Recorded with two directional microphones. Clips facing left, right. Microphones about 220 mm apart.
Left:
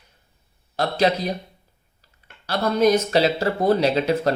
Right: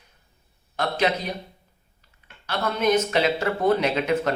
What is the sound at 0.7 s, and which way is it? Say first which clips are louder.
Speech: left 3 dB; 35° left (ahead or behind).